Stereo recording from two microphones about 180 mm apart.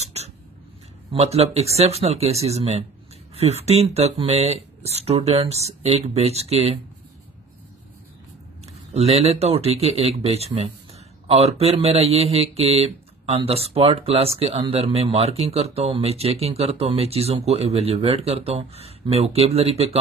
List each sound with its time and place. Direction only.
0.0 s a sound: 35° right (ahead or behind)
1.1 s speech: 35° right (ahead or behind)
8.9 s speech: 35° right (ahead or behind)